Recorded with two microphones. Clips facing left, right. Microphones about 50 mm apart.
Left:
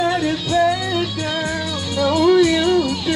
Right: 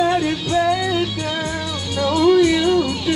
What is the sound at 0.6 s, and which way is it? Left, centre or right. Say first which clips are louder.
Music: left 1 dB; centre.